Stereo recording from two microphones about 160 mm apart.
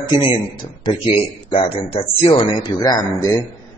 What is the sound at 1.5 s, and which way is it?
Speech, 35° left (ahead or behind).